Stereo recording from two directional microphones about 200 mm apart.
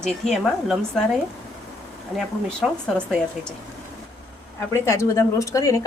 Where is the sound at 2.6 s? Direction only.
Centre (ahead or behind).